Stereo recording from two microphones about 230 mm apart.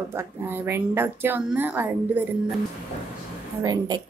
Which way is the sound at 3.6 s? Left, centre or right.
Centre.